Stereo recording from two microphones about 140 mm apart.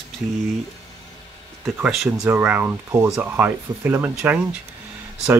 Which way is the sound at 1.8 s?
5° right (ahead or behind).